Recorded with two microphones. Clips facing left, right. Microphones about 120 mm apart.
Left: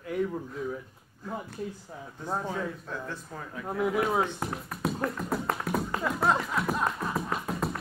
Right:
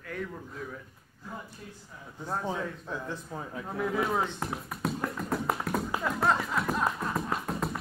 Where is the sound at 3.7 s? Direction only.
15° left (ahead or behind).